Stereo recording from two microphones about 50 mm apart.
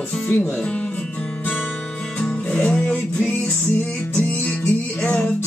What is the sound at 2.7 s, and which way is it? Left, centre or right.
Music, centre.